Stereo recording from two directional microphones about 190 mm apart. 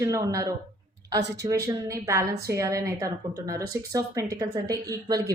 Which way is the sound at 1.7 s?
15° right (ahead or behind).